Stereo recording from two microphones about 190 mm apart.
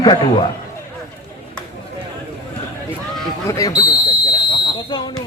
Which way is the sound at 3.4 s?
20° left (ahead or behind).